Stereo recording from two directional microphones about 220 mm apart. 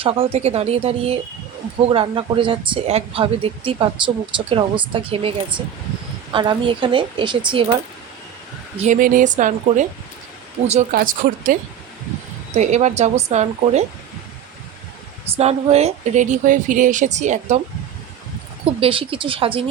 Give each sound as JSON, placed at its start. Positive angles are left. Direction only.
{"t": 0.0, "sound": "speech", "side_deg": -25}
{"t": 8.8, "sound": "speech", "side_deg": -35}
{"t": 12.5, "sound": "speech", "side_deg": -30}
{"t": 15.4, "sound": "speech", "side_deg": -30}
{"t": 18.6, "sound": "speech", "side_deg": -25}